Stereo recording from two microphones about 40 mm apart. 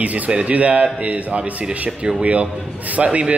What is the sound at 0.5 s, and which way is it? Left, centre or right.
A man's voice, right.